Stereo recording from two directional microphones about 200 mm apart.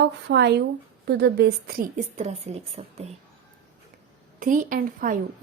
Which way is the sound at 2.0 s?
35° right (ahead or behind).